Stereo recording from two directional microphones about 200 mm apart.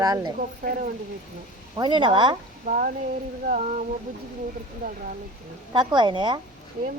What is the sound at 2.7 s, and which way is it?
Speech, 45° right (ahead or behind).